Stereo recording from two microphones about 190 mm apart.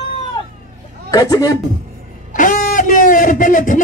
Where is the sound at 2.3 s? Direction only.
45° left (ahead or behind).